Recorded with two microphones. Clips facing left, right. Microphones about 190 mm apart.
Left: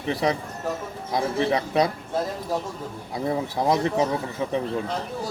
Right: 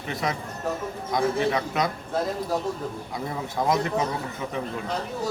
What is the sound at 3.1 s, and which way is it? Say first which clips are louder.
A man's voice: left 5 dB; 35° left (ahead or behind).